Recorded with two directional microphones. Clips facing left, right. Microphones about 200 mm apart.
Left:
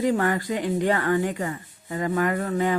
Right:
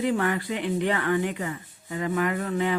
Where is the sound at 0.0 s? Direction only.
40° left (ahead or behind).